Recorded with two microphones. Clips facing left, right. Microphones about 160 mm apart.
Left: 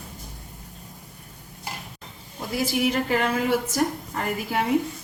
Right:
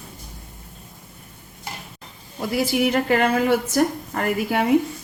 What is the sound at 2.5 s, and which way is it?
A woman's voice, 65° right (ahead or behind).